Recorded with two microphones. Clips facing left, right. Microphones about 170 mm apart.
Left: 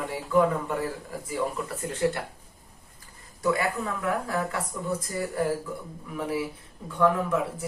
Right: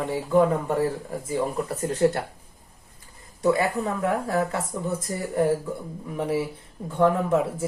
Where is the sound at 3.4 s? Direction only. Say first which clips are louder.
Right 4 dB; 30° right (ahead or behind).